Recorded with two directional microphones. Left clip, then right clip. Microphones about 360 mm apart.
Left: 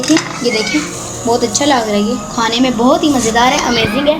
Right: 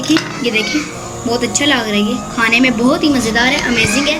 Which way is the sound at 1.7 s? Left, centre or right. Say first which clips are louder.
Left 2 dB; left.